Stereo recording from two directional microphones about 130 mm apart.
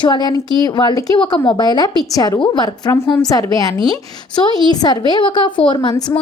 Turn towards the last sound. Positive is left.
turn(degrees=35)  # may be behind; listen again after turning